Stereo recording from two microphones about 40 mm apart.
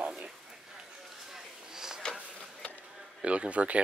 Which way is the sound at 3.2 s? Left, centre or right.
Right.